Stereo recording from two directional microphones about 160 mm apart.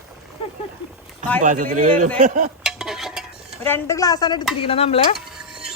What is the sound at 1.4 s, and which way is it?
A man's voice, 50° right (ahead or behind).